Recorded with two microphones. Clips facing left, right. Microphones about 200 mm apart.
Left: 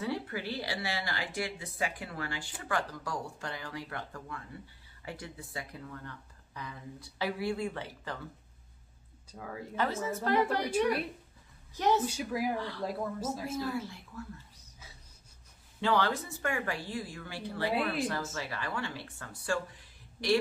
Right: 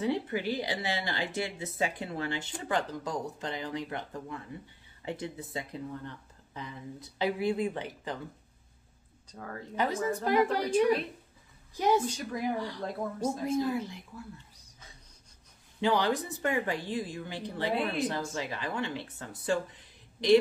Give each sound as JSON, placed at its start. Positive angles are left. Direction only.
{"t": 0.0, "sound": "speech", "side_deg": -20}
{"t": 9.3, "sound": "speech", "side_deg": 5}
{"t": 9.8, "sound": "a woman's voice", "side_deg": -15}
{"t": 11.7, "sound": "a woman's voice", "side_deg": -10}
{"t": 12.1, "sound": "speech", "side_deg": 5}
{"t": 12.5, "sound": "a woman's voice", "side_deg": -15}
{"t": 12.8, "sound": "speech", "side_deg": 0}
{"t": 13.5, "sound": "a woman's voice", "side_deg": -20}
{"t": 15.8, "sound": "speech", "side_deg": -15}